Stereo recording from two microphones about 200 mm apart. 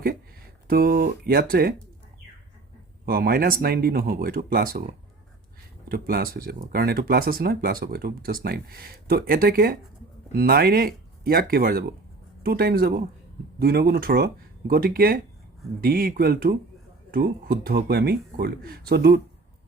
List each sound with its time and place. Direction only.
0.7 s speech: 50° right (ahead or behind)
3.1 s speech: 50° right (ahead or behind)
5.9 s speech: 50° right (ahead or behind)